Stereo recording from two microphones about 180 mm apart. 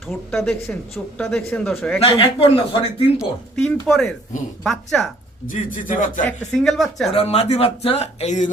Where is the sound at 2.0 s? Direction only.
30° left (ahead or behind).